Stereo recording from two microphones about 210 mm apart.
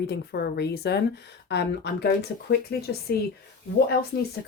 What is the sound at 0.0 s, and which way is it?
Speech, 50° left (ahead or behind).